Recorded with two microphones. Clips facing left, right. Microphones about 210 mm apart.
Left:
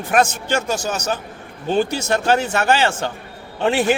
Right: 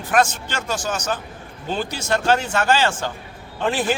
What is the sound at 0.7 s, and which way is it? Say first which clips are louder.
Speech: left 2 dB; 40° left (ahead or behind).